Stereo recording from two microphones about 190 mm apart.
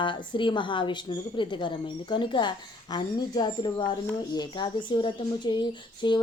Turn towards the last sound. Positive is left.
turn(degrees=25)  # may be behind; listen again after turning